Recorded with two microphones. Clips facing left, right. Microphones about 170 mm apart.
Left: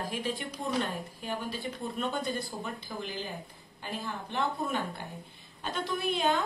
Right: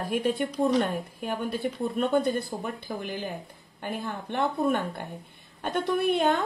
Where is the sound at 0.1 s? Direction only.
55° right (ahead or behind).